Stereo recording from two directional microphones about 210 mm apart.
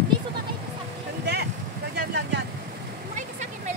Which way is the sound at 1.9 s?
50° right (ahead or behind).